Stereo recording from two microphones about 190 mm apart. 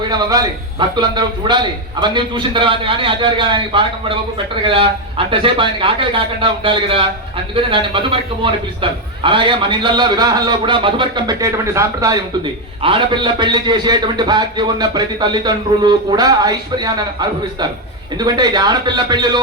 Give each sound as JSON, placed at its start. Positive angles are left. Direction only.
{"t": 0.0, "sound": "a man's voice", "side_deg": -20}